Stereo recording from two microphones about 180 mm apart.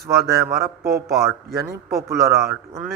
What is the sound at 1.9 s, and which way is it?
Speech, 15° right (ahead or behind).